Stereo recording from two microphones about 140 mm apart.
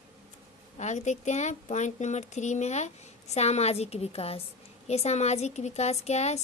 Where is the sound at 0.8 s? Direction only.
55° left (ahead or behind).